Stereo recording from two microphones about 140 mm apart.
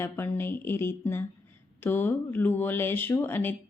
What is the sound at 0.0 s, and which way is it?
Speech, 15° left (ahead or behind).